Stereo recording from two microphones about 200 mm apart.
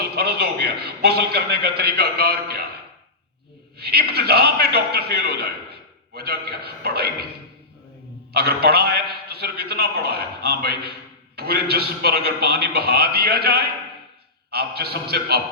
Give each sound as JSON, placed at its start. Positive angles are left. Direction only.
{"t": 0.0, "sound": "a man's voice", "side_deg": -50}
{"t": 3.8, "sound": "a man's voice", "side_deg": -55}
{"t": 8.3, "sound": "a man's voice", "side_deg": -50}